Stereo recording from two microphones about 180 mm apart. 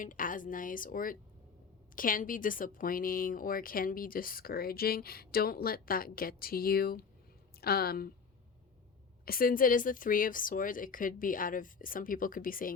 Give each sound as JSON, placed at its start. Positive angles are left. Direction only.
{"t": 0.0, "sound": "a woman's voice", "side_deg": 50}
{"t": 9.2, "sound": "speech", "side_deg": 55}